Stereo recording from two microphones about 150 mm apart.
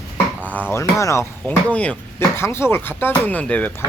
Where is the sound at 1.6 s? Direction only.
10° left (ahead or behind).